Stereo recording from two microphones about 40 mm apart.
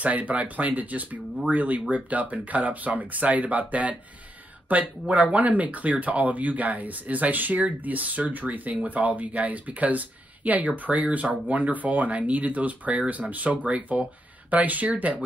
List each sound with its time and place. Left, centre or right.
0.0 s speech: right